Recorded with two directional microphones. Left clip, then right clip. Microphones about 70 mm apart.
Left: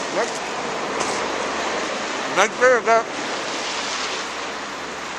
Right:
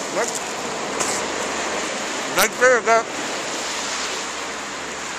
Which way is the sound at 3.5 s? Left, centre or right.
Left.